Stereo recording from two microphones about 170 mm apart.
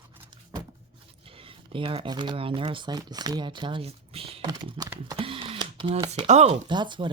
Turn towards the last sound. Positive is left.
turn(degrees=-30)  # may be behind; listen again after turning